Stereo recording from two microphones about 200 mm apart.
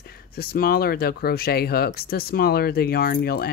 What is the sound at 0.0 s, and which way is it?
Speech, 50° left (ahead or behind).